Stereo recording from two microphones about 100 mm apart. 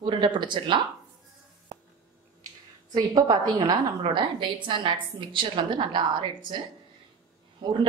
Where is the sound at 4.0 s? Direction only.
55° right (ahead or behind).